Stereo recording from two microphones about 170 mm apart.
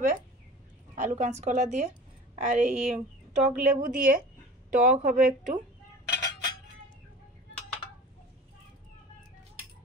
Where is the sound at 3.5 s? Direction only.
55° right (ahead or behind).